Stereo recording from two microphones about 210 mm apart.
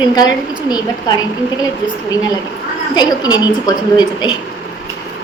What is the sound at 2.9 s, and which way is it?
A woman's voice, 20° left (ahead or behind).